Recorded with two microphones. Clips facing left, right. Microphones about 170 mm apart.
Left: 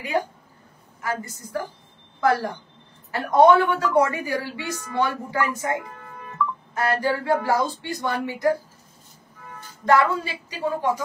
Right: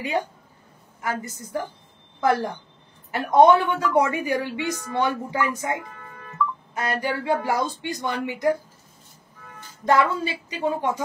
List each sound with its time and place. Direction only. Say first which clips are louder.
1.0 s a woman's voice: even; 20° right (ahead or behind)
6.8 s a woman's voice: left 3 dB; 20° right (ahead or behind)
9.8 s a woman's voice: left 1 dB; 20° right (ahead or behind)